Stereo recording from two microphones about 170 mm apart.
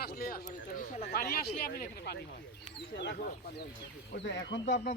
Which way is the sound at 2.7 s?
90° left.